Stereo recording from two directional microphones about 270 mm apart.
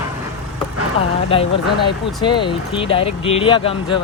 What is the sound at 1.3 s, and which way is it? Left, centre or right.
Speech, centre.